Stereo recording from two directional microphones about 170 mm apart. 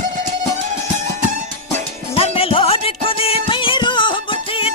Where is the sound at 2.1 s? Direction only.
35° left (ahead or behind).